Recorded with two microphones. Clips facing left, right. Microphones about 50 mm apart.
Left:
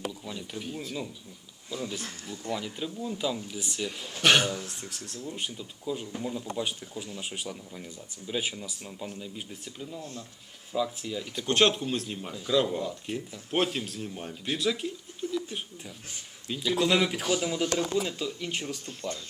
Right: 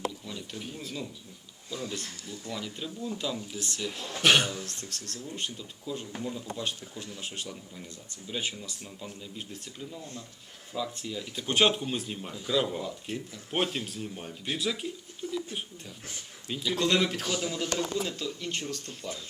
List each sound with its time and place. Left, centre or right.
0.3 s a man's voice: centre
2.2 s speech: left
2.6 s speech: centre
4.5 s a man's voice: centre
16.5 s a man's voice: centre